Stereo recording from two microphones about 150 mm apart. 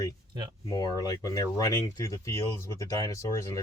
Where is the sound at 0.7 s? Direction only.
25° left (ahead or behind).